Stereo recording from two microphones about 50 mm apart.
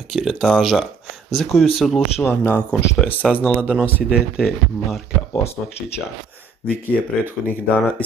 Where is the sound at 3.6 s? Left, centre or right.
Right.